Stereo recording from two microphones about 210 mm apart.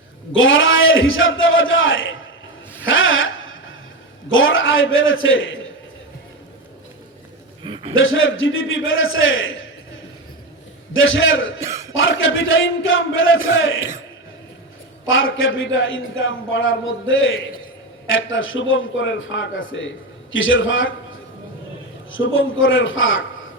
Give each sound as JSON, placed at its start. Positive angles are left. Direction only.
{"t": 0.3, "sound": "a man's voice", "side_deg": 65}
{"t": 2.8, "sound": "a sound", "side_deg": 70}
{"t": 4.3, "sound": "a man's voice", "side_deg": 70}
{"t": 7.6, "sound": "a sound", "side_deg": -25}
{"t": 7.9, "sound": "a man's voice", "side_deg": 70}
{"t": 10.9, "sound": "a man's voice", "side_deg": 70}
{"t": 11.6, "sound": "a man's voice", "side_deg": -15}
{"t": 11.9, "sound": "a man's voice", "side_deg": 65}
{"t": 15.0, "sound": "a man's voice", "side_deg": 65}